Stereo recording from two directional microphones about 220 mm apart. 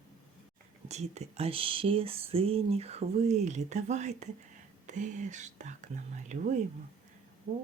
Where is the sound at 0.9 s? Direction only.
30° right (ahead or behind).